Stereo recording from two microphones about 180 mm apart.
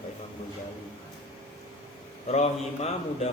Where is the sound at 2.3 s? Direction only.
40° left (ahead or behind).